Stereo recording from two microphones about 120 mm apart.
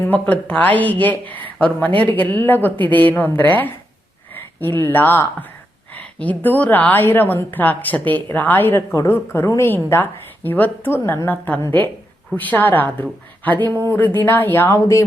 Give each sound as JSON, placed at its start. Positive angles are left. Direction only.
{"t": 0.0, "sound": "a woman's voice", "side_deg": 15}